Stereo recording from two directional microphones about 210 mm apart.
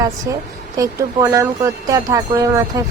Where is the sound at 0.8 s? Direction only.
15° right (ahead or behind).